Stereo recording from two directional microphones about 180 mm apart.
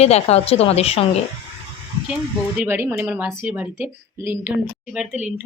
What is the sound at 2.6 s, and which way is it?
Speech, 10° right (ahead or behind).